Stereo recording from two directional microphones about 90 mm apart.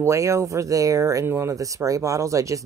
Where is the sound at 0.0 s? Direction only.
35° right (ahead or behind).